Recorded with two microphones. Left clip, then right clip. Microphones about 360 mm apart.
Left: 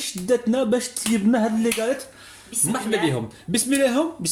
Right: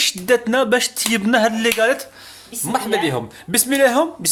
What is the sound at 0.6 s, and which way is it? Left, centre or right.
Speech, right.